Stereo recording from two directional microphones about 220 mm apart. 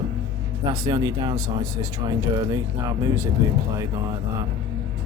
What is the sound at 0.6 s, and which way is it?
Speech, 20° right (ahead or behind).